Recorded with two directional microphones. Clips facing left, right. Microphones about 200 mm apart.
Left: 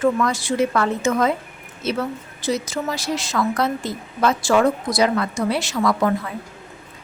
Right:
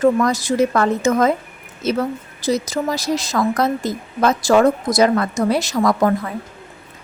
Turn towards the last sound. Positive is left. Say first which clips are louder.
# right 3 dB
turn(degrees=-45)  # may be behind; listen again after turning